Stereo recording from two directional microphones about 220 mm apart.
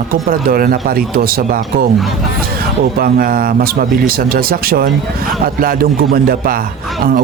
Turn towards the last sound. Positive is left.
turn(degrees=-40)  # may be behind; listen again after turning